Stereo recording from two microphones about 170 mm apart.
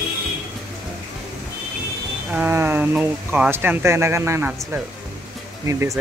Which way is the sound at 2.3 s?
10° right (ahead or behind).